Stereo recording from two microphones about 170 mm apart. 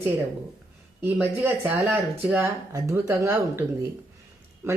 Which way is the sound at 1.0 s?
15° right (ahead or behind).